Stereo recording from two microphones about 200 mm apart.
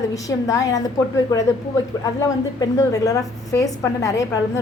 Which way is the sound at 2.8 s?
15° left (ahead or behind).